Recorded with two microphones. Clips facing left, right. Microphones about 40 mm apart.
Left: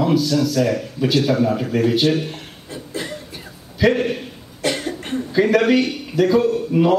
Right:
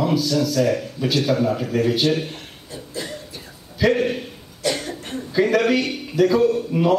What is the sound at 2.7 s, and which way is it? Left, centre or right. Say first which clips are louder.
Cough: left 3 dB; left.